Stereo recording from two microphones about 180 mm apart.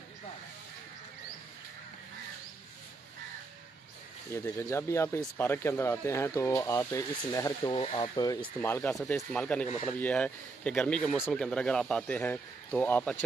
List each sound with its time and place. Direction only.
4.3 s speech: 15° left (ahead or behind)